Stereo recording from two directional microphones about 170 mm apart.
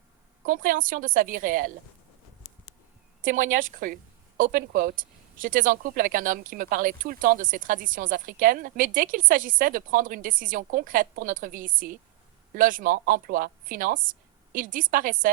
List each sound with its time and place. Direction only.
0.4 s speech: 55° right (ahead or behind)
3.2 s speech: 55° right (ahead or behind)